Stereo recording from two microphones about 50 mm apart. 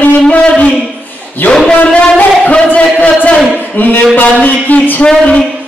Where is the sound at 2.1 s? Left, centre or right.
Left.